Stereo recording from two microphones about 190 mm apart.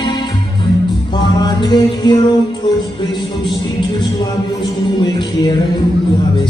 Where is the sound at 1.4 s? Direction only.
20° left (ahead or behind).